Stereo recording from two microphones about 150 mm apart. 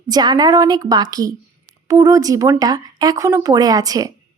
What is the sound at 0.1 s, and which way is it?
A woman's voice, 25° right (ahead or behind).